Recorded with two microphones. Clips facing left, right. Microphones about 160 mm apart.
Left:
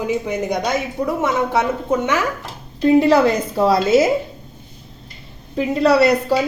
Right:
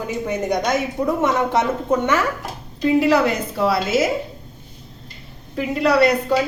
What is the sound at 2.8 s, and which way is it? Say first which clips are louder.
A woman's voice: left 3 dB; 30° left (ahead or behind).